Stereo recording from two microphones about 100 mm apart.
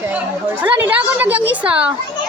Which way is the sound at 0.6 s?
15° right (ahead or behind).